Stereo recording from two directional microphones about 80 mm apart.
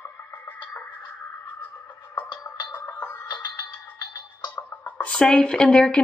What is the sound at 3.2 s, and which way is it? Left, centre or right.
Music, left.